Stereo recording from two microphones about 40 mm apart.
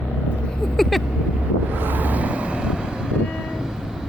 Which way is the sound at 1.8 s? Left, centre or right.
Right.